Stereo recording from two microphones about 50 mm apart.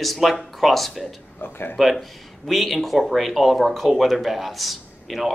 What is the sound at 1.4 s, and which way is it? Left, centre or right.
Speech, left.